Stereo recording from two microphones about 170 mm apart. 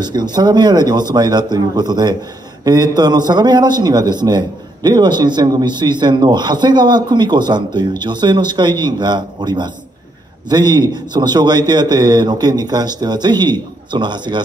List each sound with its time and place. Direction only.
0.0 s a man's voice: 25° right (ahead or behind)